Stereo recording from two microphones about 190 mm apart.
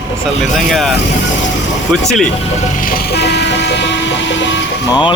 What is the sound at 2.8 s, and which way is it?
Vehicle, 50° left (ahead or behind).